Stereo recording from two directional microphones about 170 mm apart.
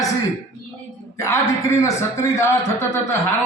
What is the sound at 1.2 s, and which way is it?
A man's voice, 15° left (ahead or behind).